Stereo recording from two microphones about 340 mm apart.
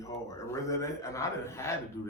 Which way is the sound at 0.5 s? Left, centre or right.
Centre.